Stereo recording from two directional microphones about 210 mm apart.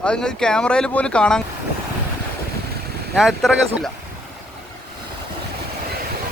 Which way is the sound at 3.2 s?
Centre (ahead or behind).